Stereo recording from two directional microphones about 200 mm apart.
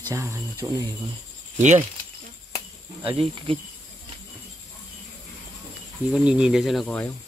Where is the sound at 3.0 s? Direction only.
25° right (ahead or behind).